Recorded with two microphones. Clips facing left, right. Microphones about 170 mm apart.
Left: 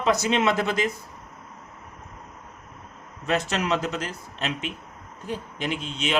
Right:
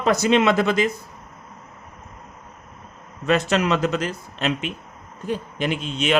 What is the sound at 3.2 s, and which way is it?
Speech, 70° right (ahead or behind).